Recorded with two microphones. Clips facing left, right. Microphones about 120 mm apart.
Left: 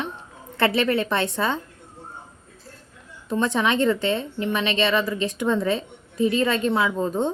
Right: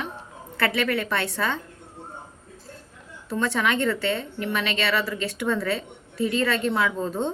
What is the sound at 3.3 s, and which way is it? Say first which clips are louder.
A woman's voice: left 2 dB; 20° left (ahead or behind).